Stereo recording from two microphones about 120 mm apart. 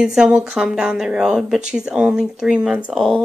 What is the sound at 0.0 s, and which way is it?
Speech, 5° right (ahead or behind).